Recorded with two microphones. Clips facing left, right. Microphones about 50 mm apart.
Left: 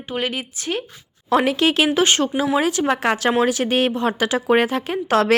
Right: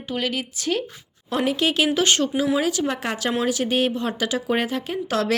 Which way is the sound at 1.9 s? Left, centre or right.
Left.